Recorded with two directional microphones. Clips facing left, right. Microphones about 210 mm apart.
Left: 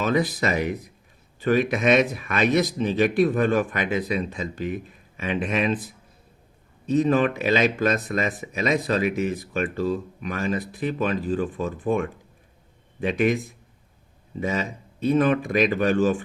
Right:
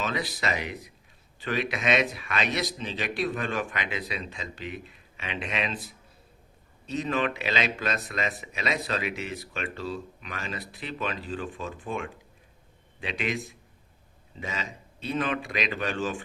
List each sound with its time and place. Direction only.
0.0 s speech: 50° left (ahead or behind)
6.8 s speech: 45° left (ahead or behind)
14.3 s speech: 45° left (ahead or behind)